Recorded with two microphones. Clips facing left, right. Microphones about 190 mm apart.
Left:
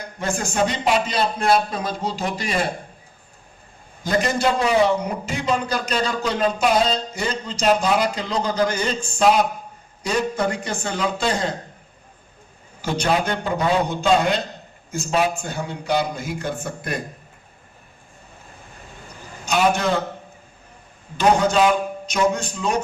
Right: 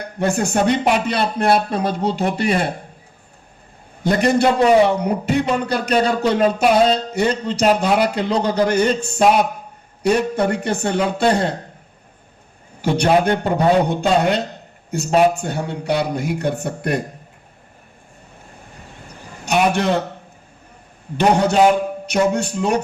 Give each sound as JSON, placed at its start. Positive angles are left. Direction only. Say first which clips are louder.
{"t": 0.0, "sound": "a man's voice", "louder": "right 6 dB", "side_deg": -65}
{"t": 4.0, "sound": "a man's voice", "louder": "right 5 dB", "side_deg": -65}
{"t": 12.8, "sound": "a man's voice", "louder": "right 6 dB", "side_deg": -65}
{"t": 19.5, "sound": "a man's voice", "louder": "right 2 dB", "side_deg": -65}
{"t": 22.0, "sound": "a man's voice", "louder": "right 4 dB", "side_deg": -65}